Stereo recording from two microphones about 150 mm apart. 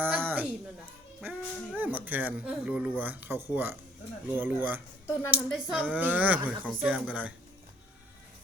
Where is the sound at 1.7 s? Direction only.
10° right (ahead or behind).